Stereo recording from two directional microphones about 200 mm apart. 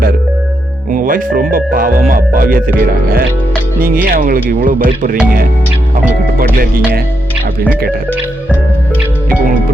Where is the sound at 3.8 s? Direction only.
45° right (ahead or behind).